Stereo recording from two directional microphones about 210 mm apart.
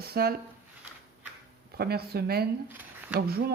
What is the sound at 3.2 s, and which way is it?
Speech, 50° right (ahead or behind).